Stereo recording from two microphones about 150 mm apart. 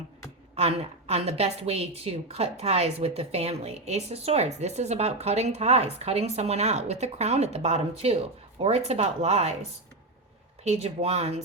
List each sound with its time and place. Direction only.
0.5 s a woman's voice: 45° right (ahead or behind)
10.6 s a woman's voice: 45° right (ahead or behind)